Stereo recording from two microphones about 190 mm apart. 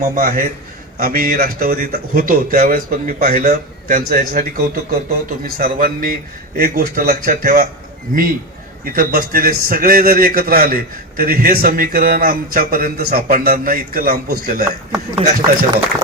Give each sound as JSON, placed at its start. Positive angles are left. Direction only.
{"t": 0.0, "sound": "speech", "side_deg": -45}
{"t": 8.8, "sound": "speech", "side_deg": -50}
{"t": 14.9, "sound": "speech", "side_deg": -15}